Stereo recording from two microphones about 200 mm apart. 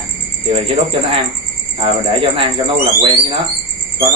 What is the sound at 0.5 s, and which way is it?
Speech, 25° right (ahead or behind).